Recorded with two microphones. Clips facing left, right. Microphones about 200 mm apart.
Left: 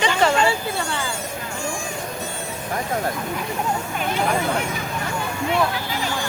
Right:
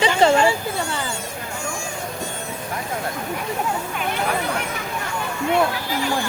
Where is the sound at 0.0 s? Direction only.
30° right (ahead or behind).